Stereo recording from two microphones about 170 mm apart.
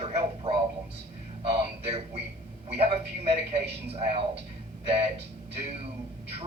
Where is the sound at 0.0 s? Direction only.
35° right (ahead or behind).